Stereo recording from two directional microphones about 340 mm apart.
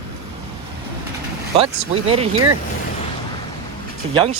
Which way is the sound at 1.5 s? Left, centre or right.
Centre.